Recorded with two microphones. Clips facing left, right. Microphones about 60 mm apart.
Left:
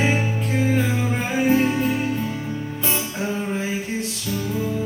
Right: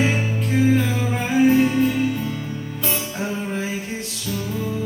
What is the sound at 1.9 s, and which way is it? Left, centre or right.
Music, centre.